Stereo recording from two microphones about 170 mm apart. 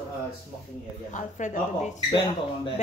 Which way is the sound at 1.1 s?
45° left (ahead or behind).